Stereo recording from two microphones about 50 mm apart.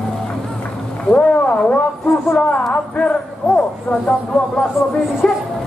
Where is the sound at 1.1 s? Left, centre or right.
Left.